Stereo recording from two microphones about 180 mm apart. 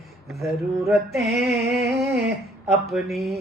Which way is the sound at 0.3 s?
Centre (ahead or behind).